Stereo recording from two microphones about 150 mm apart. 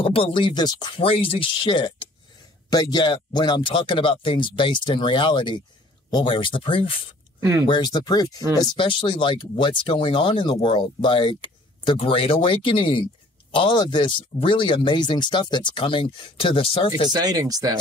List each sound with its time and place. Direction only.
0.0 s speech: 35° left (ahead or behind)
7.3 s speech: 20° right (ahead or behind)
7.6 s speech: 30° left (ahead or behind)
17.1 s speech: 25° right (ahead or behind)